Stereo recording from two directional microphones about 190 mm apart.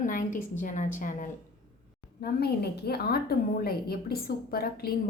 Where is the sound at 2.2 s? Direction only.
55° left (ahead or behind).